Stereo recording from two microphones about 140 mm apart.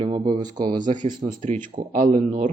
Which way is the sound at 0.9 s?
65° right (ahead or behind).